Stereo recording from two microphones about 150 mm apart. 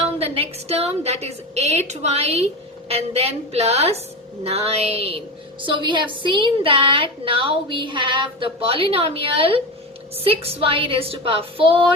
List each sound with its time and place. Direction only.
0.2 s a woman's voice: 40° right (ahead or behind)